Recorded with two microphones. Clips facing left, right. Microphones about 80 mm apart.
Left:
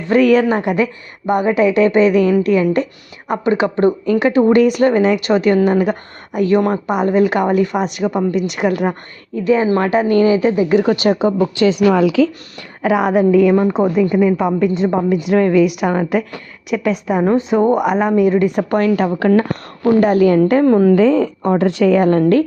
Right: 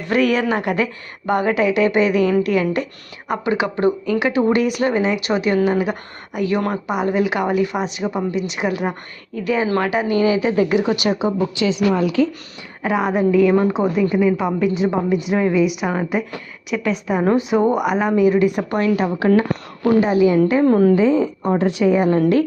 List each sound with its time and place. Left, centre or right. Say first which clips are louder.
0.1 s speech: left 6 dB; left
0.4 s a woman's voice: left 4 dB; left
9.4 s a woman's voice: left 5 dB; left
9.9 s speech: left 6 dB; left
11.5 s a woman's voice: left 5 dB; left
12.8 s a woman's voice: left 4 dB; centre
18.5 s speech: left 4 dB; left
20.0 s a woman's voice: left 3 dB; left
20.7 s speech: left 1 dB; left
20.9 s a woman's voice: left 3 dB; left